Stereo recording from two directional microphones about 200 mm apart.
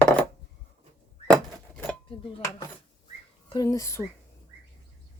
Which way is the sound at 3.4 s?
20° left (ahead or behind).